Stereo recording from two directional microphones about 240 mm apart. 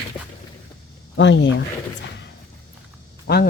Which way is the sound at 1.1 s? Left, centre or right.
Left.